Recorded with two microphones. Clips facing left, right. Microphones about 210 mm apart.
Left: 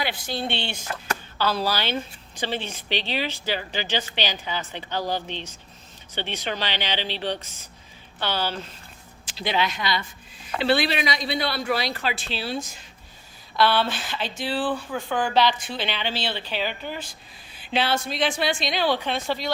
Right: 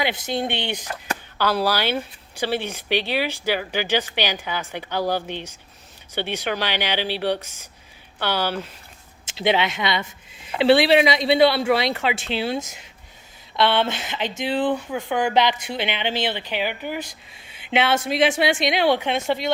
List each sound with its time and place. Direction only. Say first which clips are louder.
0.0 s speech: right 4 dB; 20° right (ahead or behind)
9.4 s speech: right 5 dB; 25° right (ahead or behind)